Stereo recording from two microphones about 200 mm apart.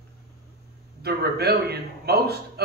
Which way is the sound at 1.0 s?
50° right (ahead or behind).